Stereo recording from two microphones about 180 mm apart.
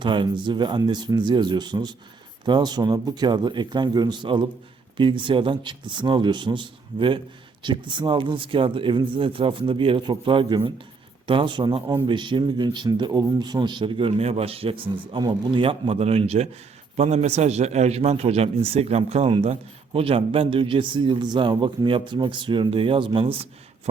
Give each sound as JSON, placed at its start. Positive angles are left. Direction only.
{"t": 0.0, "sound": "a man's voice", "side_deg": -25}